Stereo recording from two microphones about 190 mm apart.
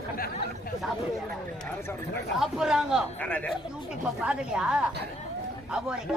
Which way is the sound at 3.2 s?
5° left (ahead or behind).